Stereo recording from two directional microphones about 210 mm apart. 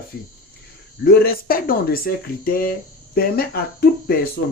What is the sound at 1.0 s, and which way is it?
Speech, 45° left (ahead or behind).